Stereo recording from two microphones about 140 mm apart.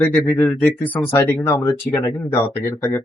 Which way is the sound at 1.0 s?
15° left (ahead or behind).